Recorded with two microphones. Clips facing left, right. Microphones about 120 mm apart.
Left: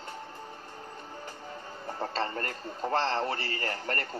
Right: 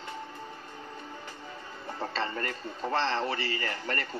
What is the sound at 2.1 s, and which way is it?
A man's voice, 40° left (ahead or behind).